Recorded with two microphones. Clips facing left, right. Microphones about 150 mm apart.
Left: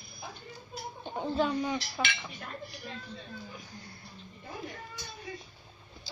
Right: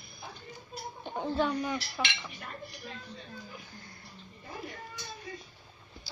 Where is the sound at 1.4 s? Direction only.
25° left (ahead or behind).